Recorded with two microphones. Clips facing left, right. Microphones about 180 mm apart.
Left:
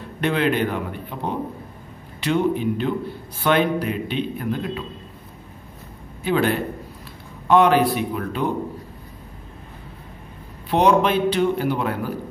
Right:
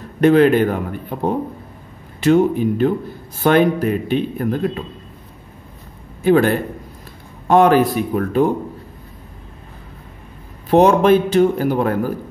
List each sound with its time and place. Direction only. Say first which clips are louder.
0.2 s a man's voice: right 9 dB; 45° right (ahead or behind)
6.2 s a man's voice: right 6 dB; 45° right (ahead or behind)
10.7 s a man's voice: right 6 dB; 45° right (ahead or behind)